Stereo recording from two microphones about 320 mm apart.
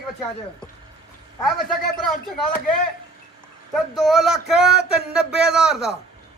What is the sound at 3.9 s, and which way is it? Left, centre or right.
A man's voice, centre.